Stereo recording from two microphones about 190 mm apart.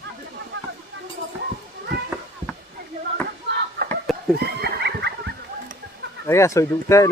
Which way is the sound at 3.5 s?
55° right (ahead or behind).